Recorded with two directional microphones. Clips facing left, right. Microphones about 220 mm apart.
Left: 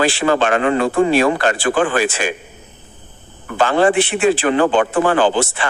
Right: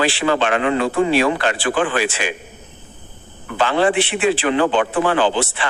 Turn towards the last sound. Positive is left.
turn(degrees=45)  # may be behind; listen again after turning